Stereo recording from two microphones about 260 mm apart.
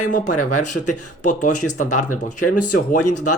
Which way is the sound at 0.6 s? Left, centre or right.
Left.